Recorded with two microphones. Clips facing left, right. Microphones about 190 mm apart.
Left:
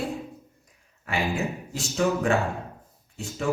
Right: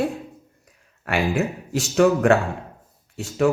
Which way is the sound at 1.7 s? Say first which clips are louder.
Right 8 dB; 70° right (ahead or behind).